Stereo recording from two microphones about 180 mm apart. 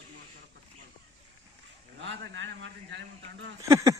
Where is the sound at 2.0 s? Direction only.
85° right.